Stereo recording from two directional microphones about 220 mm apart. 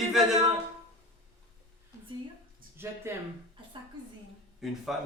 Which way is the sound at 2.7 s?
10° right (ahead or behind).